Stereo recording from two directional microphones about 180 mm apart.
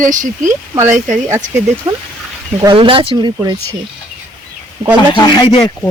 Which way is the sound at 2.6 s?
30° right (ahead or behind).